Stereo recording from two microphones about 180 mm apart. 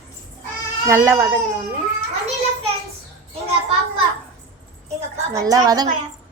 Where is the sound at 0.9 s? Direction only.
15° right (ahead or behind).